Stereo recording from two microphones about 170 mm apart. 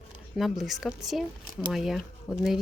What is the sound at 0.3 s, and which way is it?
Speech, centre (ahead or behind).